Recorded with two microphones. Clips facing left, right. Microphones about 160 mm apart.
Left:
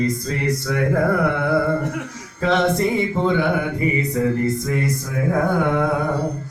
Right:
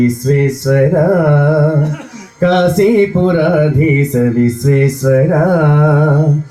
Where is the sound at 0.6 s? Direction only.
55° right (ahead or behind).